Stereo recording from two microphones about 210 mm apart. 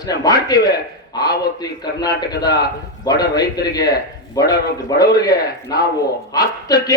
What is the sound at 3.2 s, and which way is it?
A man's voice, 20° left (ahead or behind).